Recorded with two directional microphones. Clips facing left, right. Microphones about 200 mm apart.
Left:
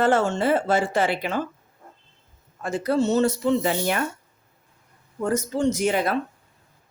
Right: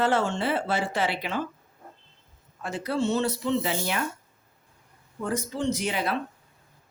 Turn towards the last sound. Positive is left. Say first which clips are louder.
# left 6 dB
turn(degrees=45)  # may be behind; listen again after turning